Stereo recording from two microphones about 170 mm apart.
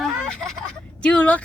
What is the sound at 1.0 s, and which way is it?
Speech, 5° left (ahead or behind).